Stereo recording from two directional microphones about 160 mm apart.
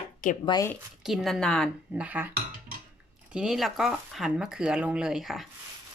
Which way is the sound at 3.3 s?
5° right (ahead or behind).